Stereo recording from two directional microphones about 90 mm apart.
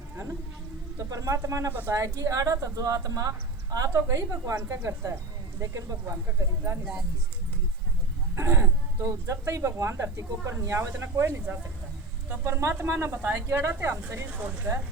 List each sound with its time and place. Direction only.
0.9 s speech: 35° right (ahead or behind)
8.4 s speech: 25° right (ahead or behind)